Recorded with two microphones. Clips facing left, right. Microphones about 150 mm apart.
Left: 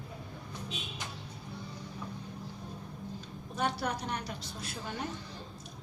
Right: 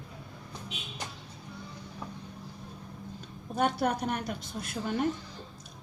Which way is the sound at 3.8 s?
50° right (ahead or behind).